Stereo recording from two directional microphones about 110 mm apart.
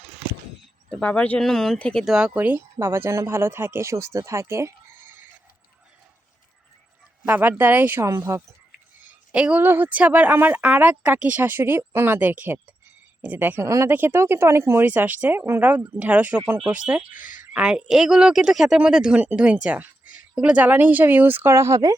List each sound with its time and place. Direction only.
0.9 s speech: 10° left (ahead or behind)
2.0 s speech: 5° right (ahead or behind)
2.7 s speech: 25° right (ahead or behind)
7.3 s speech: 15° right (ahead or behind)
9.3 s speech: 10° right (ahead or behind); by 21.9 s 30° right (ahead or behind)